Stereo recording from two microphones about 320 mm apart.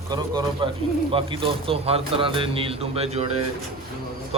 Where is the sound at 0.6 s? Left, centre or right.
Centre.